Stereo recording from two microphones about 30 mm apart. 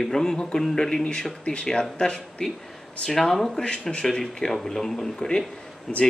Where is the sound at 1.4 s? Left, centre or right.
Left.